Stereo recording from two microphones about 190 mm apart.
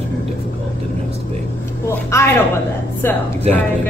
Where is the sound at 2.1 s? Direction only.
15° left (ahead or behind).